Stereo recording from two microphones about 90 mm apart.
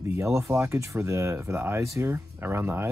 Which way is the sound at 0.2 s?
35° right (ahead or behind).